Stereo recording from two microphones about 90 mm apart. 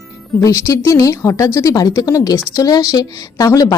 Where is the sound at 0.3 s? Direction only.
35° left (ahead or behind).